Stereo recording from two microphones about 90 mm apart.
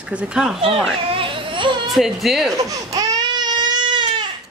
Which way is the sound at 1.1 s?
75° right (ahead or behind).